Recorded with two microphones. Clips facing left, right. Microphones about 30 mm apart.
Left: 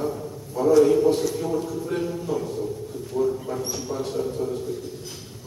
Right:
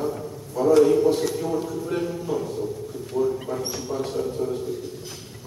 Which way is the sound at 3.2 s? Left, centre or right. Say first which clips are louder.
Even; right.